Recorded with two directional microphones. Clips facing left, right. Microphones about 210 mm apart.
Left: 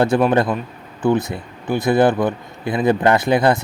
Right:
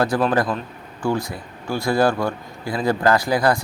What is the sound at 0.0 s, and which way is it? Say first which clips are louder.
A man's voice: left 4 dB; 25° left (ahead or behind).